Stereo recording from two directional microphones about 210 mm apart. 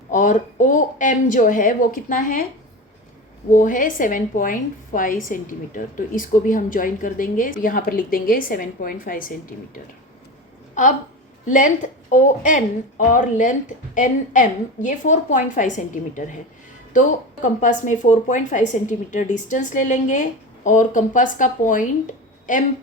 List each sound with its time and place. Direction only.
0.1 s a woman's voice: 35° left (ahead or behind)
3.5 s a woman's voice: 40° left (ahead or behind)
11.4 s a woman's voice: 35° left (ahead or behind)